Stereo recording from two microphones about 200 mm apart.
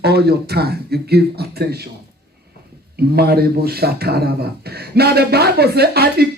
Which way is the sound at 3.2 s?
50° right (ahead or behind).